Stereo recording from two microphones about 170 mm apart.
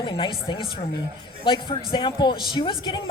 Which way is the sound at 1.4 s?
30° left (ahead or behind).